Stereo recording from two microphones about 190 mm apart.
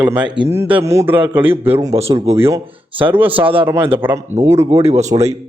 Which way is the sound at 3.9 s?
10° right (ahead or behind).